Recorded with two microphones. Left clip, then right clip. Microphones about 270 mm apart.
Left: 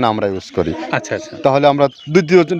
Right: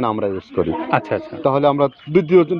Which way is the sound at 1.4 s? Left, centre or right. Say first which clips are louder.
Left 4 dB; left.